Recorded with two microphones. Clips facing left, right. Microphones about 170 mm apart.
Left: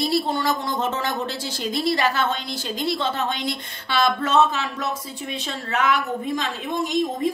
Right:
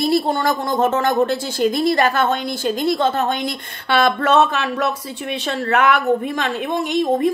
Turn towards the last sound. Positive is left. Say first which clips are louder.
# right 5 dB
turn(degrees=-65)  # may be behind; listen again after turning